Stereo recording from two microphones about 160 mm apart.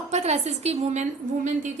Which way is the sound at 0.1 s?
45° right (ahead or behind).